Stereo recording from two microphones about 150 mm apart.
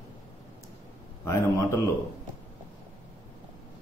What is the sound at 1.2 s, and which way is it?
Speech, 20° left (ahead or behind).